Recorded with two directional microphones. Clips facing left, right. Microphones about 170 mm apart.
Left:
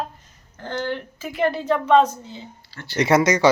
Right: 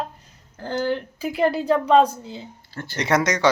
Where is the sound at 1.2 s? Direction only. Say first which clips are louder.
Right 1 dB; 35° right (ahead or behind).